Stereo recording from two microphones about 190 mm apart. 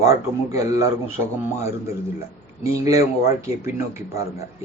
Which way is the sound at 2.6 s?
15° right (ahead or behind).